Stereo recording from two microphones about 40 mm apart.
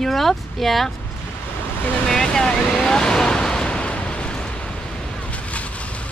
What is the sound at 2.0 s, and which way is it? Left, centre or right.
Vehicle, centre.